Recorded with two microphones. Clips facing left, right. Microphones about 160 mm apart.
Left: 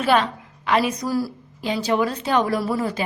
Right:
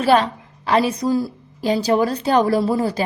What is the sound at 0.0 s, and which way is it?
A woman's voice, 35° right (ahead or behind).